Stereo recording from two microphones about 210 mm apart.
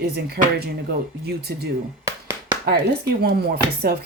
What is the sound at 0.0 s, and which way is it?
Speech, 50° right (ahead or behind).